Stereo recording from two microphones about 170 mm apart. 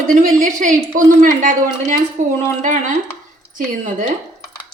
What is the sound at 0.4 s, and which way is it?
A woman's voice, 50° right (ahead or behind).